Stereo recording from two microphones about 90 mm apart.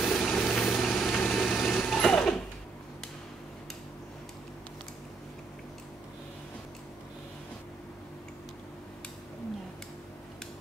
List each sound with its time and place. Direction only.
0.0 s engine: 10° left (ahead or behind)